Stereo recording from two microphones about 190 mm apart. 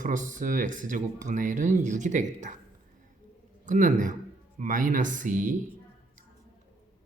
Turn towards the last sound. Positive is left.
turn(degrees=-45)  # may be behind; listen again after turning